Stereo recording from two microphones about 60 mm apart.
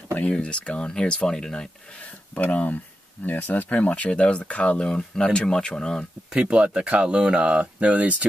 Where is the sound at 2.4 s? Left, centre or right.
Left.